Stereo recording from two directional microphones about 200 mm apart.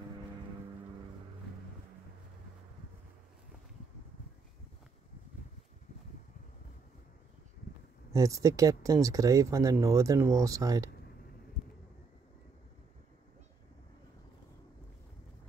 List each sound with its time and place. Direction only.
8.1 s speech: 15° right (ahead or behind)